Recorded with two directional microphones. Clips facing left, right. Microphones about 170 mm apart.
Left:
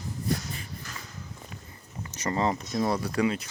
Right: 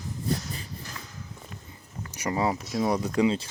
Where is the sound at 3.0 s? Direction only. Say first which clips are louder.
Right 3 dB; 20° right (ahead or behind).